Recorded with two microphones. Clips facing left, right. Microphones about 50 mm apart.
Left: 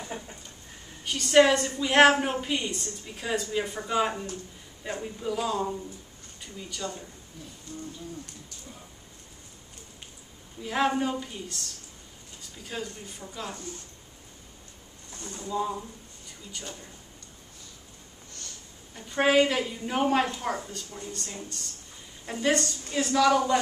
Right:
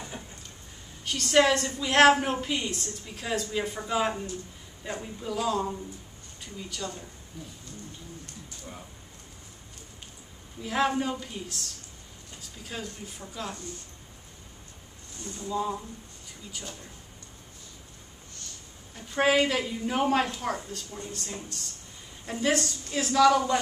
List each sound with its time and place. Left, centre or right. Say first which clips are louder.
1.0 s a woman's voice: left 2 dB; centre
10.6 s a woman's voice: left 1 dB; centre
15.4 s a woman's voice: even; centre
18.9 s a woman's voice: left 1 dB; centre